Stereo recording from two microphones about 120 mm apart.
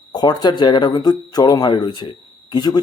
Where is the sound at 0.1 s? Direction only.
35° left (ahead or behind).